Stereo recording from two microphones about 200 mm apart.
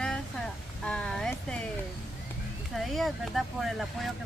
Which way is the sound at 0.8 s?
5° left (ahead or behind).